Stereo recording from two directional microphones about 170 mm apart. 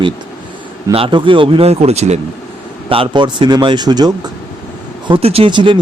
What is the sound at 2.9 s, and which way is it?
Speech, 30° right (ahead or behind).